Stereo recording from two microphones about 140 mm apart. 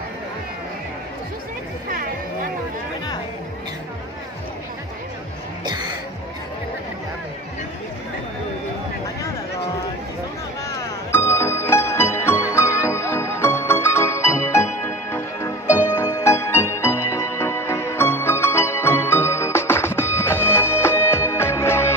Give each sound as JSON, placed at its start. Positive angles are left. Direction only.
{"t": 1.9, "sound": "music", "side_deg": -90}
{"t": 5.6, "sound": "music", "side_deg": -30}
{"t": 10.7, "sound": "music", "side_deg": 20}